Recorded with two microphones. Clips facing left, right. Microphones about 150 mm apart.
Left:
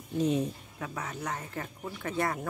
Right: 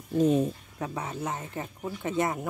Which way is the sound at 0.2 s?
45° right (ahead or behind).